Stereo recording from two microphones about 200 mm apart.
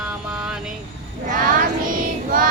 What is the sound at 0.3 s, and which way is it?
Vehicle, 5° right (ahead or behind).